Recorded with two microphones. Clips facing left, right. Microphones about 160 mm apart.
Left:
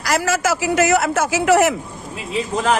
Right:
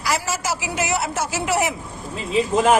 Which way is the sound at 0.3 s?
50° left (ahead or behind).